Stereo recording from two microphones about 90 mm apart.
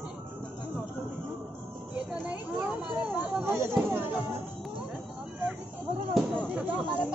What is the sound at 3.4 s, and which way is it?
Speech, 25° right (ahead or behind).